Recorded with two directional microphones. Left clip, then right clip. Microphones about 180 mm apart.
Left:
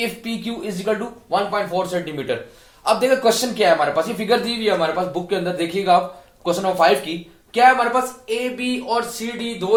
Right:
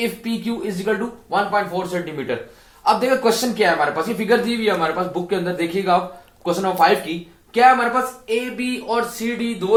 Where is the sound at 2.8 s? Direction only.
40° left (ahead or behind).